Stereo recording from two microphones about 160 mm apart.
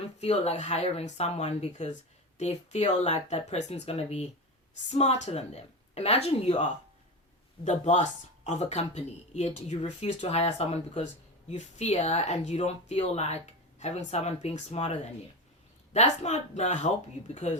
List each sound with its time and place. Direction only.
0.2 s speech: 40° left (ahead or behind)
7.6 s speech: 50° left (ahead or behind)